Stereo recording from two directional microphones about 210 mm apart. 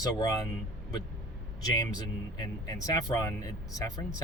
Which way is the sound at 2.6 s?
15° left (ahead or behind).